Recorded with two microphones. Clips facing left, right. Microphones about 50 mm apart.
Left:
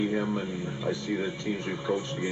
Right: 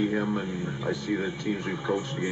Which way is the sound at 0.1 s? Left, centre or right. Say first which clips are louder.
Right 1 dB; centre.